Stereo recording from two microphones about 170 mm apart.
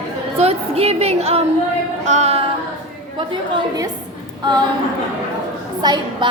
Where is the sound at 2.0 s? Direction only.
40° right (ahead or behind).